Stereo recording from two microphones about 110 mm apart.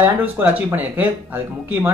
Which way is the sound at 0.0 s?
15° right (ahead or behind).